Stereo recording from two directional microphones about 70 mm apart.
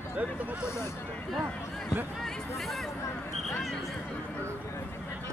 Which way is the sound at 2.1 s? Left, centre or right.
Centre.